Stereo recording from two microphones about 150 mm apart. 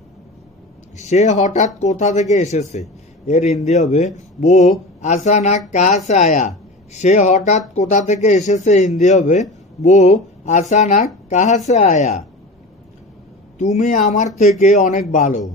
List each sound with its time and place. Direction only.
0.9 s speech: 50° left (ahead or behind)
13.6 s speech: 55° left (ahead or behind)